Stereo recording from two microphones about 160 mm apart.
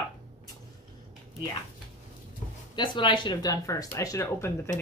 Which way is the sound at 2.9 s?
30° left (ahead or behind).